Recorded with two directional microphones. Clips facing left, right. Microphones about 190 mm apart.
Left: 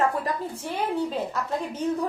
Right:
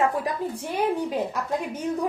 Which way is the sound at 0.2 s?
15° right (ahead or behind).